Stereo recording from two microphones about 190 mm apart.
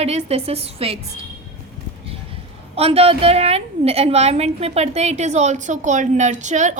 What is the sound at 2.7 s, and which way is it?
A woman's voice, 30° right (ahead or behind).